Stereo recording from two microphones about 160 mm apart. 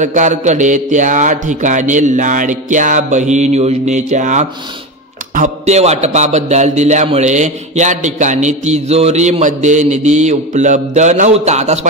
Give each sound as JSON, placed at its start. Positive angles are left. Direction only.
{"t": 0.0, "sound": "speech", "side_deg": -50}